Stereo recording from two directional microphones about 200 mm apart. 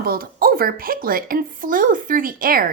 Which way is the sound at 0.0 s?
50° right (ahead or behind).